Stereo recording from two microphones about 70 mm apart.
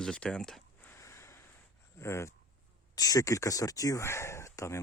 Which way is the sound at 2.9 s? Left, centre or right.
Left.